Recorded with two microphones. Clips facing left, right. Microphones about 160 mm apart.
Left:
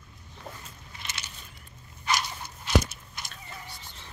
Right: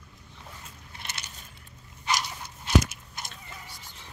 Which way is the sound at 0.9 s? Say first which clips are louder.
Even; 60° right (ahead or behind).